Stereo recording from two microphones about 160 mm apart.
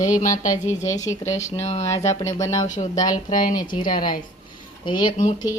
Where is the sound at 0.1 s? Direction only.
55° left (ahead or behind).